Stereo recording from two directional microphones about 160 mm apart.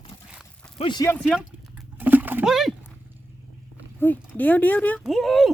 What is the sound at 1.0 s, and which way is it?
Speech, 5° left (ahead or behind).